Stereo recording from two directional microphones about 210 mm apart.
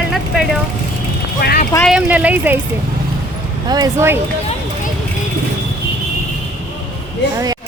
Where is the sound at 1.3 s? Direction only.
45° left (ahead or behind).